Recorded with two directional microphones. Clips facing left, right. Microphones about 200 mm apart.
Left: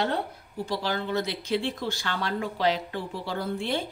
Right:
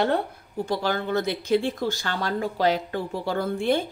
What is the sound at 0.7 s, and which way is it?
Speech, 50° right (ahead or behind).